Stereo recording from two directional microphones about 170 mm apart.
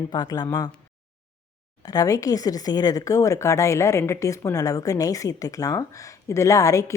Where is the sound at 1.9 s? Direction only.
20° left (ahead or behind).